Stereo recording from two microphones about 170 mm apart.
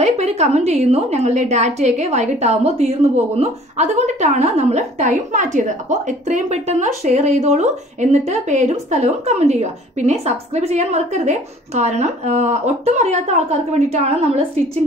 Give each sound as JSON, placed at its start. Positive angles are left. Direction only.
{"t": 0.0, "sound": "a woman's voice", "side_deg": -40}